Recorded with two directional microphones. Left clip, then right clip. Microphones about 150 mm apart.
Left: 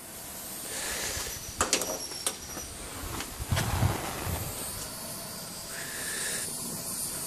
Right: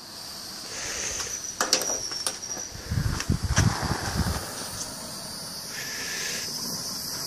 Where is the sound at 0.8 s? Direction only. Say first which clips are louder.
Right 2 dB; 25° left (ahead or behind).